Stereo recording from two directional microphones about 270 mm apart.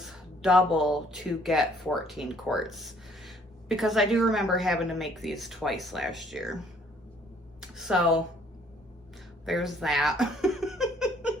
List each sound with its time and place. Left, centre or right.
0.0 s speech: centre
7.6 s a sound: centre
9.5 s speech: centre